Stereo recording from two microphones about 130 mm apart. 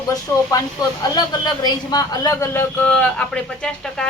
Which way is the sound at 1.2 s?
30° left (ahead or behind).